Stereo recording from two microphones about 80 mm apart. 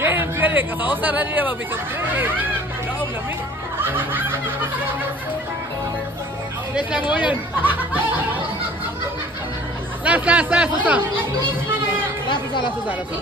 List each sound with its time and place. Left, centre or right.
0.0 s speech: right
3.8 s snicker: right
6.7 s speech: centre
10.0 s speech: centre